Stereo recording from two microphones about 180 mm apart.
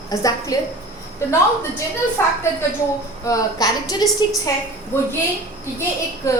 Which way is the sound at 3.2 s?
20° left (ahead or behind).